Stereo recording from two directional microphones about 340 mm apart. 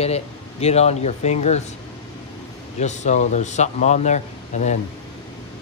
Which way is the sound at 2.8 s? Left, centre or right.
Centre.